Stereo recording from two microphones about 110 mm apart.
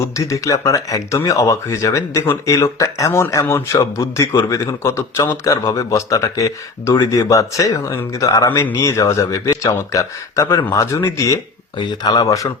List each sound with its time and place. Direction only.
0.2 s speech: 30° left (ahead or behind)
11.9 s speech: 35° left (ahead or behind)